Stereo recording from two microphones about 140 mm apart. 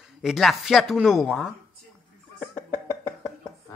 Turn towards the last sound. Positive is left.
turn(degrees=15)  # may be behind; listen again after turning